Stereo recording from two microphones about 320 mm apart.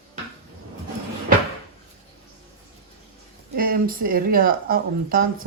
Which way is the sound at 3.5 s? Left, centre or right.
Right.